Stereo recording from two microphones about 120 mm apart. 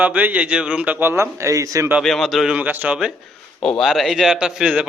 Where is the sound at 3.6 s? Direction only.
5° left (ahead or behind).